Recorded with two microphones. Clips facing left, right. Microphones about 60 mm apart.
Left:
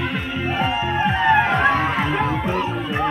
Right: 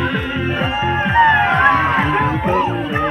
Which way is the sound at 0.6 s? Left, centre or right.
Right.